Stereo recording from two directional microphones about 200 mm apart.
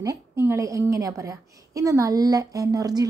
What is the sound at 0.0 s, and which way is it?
A woman's voice, 15° right (ahead or behind).